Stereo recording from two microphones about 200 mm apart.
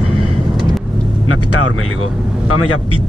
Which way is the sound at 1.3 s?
90° left.